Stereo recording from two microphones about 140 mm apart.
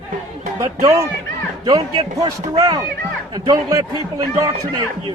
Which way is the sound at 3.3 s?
30° right (ahead or behind).